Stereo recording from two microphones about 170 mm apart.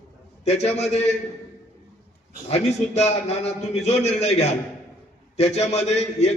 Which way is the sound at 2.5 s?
40° left (ahead or behind).